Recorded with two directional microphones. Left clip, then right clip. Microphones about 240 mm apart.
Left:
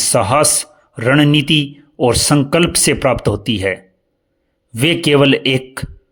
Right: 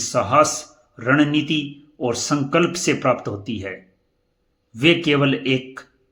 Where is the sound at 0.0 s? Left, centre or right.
Left.